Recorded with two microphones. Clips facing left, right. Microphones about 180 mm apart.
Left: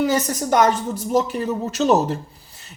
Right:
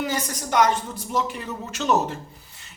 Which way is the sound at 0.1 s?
45° left (ahead or behind).